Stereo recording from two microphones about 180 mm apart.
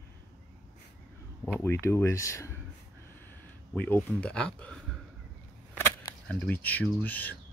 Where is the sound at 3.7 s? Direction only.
10° left (ahead or behind).